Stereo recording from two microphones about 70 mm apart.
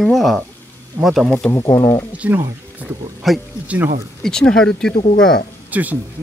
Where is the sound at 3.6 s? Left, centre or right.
Right.